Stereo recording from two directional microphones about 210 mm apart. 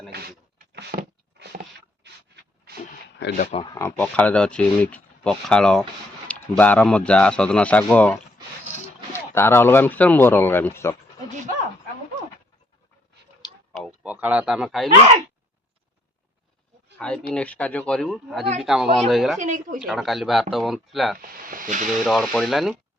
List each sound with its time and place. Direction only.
0.1 s a sound: 50° right (ahead or behind)
3.3 s speech: 35° left (ahead or behind)
3.6 s speech: 20° left (ahead or behind)
3.8 s speech: 10° left (ahead or behind)
13.7 s a sound: 5° right (ahead or behind)
17.0 s a sound: 5° left (ahead or behind)
17.3 s speech: 5° left (ahead or behind)
19.4 s speech: 40° right (ahead or behind)
19.8 s speech: centre (ahead or behind)
21.2 s snake: 40° right (ahead or behind)
22.0 s speech: centre (ahead or behind)